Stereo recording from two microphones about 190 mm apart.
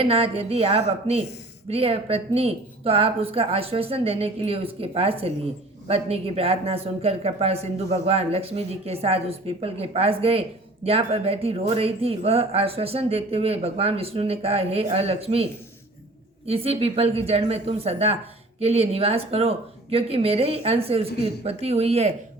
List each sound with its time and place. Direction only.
0.0 s speech: 30° right (ahead or behind)
16.5 s speech: 30° right (ahead or behind)